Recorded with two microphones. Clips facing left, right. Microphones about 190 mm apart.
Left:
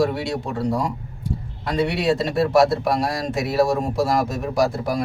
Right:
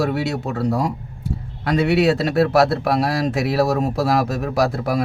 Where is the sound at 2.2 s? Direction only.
65° right (ahead or behind).